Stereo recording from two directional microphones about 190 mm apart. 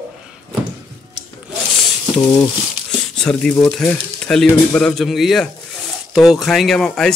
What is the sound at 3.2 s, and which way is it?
Speech, 5° left (ahead or behind).